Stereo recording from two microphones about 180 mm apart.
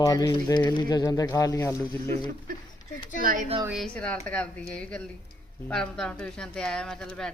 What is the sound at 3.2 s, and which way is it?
Speech, 50° right (ahead or behind).